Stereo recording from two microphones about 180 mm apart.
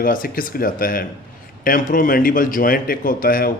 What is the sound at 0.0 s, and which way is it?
Speech, 50° left (ahead or behind).